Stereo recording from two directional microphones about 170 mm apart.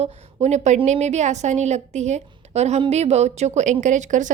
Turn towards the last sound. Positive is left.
turn(degrees=-45)  # may be behind; listen again after turning